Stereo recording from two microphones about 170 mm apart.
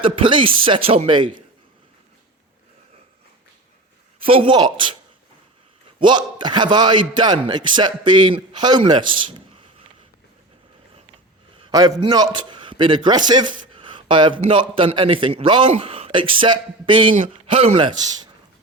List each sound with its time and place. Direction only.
0.0 s speech: 30° right (ahead or behind)
4.2 s a man's voice: 35° right (ahead or behind)
6.0 s a man's voice: 25° right (ahead or behind)
11.6 s a man's voice: 25° right (ahead or behind)